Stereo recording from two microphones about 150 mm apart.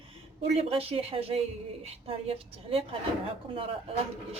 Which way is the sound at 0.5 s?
40° right (ahead or behind).